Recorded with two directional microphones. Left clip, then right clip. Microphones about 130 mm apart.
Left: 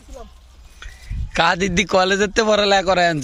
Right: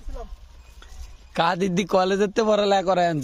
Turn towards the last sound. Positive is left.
turn(degrees=-5)  # may be behind; listen again after turning